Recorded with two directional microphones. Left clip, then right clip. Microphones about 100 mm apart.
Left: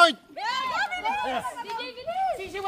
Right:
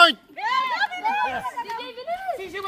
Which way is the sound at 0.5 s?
Centre (ahead or behind).